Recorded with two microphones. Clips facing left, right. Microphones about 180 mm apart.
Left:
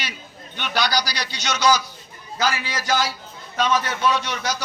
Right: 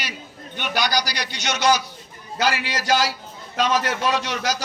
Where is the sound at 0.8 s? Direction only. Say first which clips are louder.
Left 1 dB; 45° right (ahead or behind).